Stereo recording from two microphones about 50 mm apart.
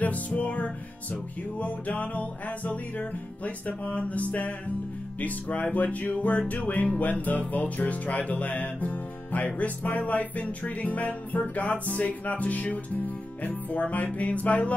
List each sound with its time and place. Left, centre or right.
0.4 s music: left